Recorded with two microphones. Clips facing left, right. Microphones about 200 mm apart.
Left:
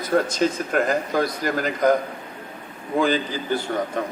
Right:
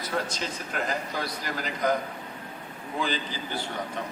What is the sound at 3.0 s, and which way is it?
Speech, 50° left (ahead or behind).